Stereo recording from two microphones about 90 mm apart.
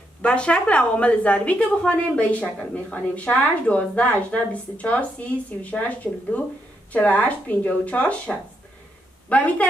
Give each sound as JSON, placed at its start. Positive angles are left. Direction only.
{"t": 0.2, "sound": "a woman's voice", "side_deg": 10}